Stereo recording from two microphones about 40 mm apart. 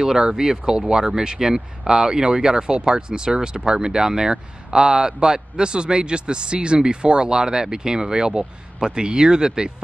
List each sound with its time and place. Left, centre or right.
0.0 s speech: centre